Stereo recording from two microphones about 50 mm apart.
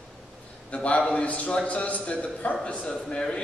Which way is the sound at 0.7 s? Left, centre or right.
Left.